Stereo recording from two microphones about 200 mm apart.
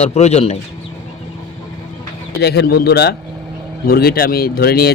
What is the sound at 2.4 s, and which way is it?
Speech, 55° left (ahead or behind).